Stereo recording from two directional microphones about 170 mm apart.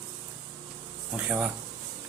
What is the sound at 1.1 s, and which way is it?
Speech, 5° right (ahead or behind).